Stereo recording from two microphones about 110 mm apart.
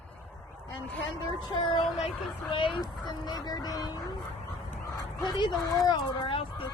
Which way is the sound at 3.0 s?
40° left (ahead or behind).